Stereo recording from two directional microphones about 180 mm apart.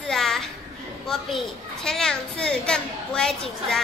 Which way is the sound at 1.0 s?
Centre (ahead or behind).